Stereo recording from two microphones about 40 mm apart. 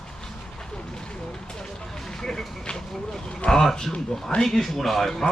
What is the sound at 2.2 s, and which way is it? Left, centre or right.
Vehicle, centre.